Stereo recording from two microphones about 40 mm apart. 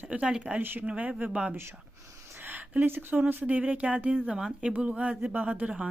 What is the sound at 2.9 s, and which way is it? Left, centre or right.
Speech, right.